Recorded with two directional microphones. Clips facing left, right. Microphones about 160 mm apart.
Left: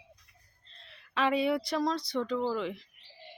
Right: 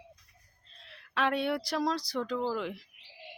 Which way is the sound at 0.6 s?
5° right (ahead or behind).